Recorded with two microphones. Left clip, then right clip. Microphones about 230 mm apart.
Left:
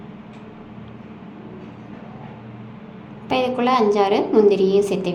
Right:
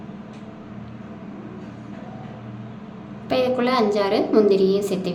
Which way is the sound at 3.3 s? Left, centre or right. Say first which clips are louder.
Left 2 dB; centre.